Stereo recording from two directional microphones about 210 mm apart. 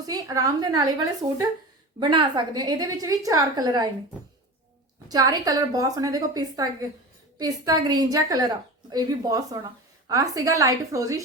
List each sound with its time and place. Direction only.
0.0 s a woman's voice: 15° right (ahead or behind)
2.0 s a woman's voice: 20° right (ahead or behind)
5.0 s a woman's voice: 20° right (ahead or behind)